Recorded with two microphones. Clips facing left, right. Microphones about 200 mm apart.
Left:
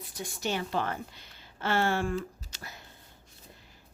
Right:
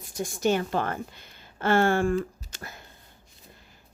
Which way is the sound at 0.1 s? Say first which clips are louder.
Right 8 dB; 45° right (ahead or behind).